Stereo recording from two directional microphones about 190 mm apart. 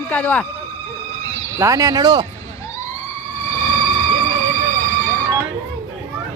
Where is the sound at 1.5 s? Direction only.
15° right (ahead or behind).